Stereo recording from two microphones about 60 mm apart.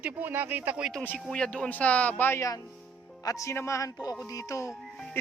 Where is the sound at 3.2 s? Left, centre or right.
Left.